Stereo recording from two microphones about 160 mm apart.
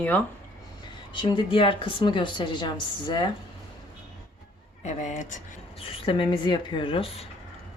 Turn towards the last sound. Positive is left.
turn(degrees=35)  # may be behind; listen again after turning